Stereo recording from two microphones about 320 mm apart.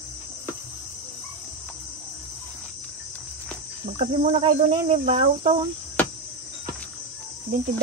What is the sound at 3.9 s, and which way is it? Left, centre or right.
Cricket, right.